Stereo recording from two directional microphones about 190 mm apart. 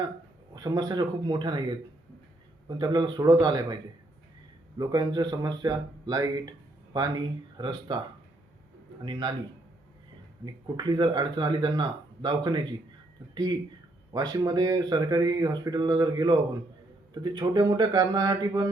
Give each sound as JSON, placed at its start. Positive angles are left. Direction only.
{"t": 0.5, "sound": "speech", "side_deg": -20}
{"t": 2.6, "sound": "speech", "side_deg": -20}
{"t": 4.8, "sound": "speech", "side_deg": -20}
{"t": 9.0, "sound": "speech", "side_deg": -25}
{"t": 10.4, "sound": "speech", "side_deg": -20}